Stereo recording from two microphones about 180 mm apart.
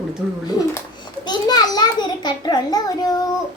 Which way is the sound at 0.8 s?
20° left (ahead or behind).